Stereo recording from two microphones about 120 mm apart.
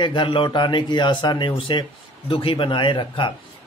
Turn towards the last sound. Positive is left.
turn(degrees=45)  # may be behind; listen again after turning